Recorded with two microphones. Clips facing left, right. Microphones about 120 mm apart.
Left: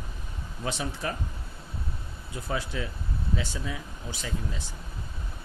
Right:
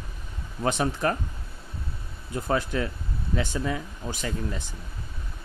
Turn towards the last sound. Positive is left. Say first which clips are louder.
# right 4 dB
turn(degrees=-50)  # may be behind; listen again after turning